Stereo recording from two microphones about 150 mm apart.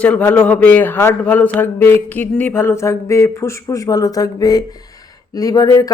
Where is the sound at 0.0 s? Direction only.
10° left (ahead or behind).